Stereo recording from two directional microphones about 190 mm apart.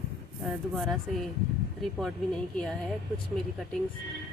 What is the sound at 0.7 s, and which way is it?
Speech, centre (ahead or behind).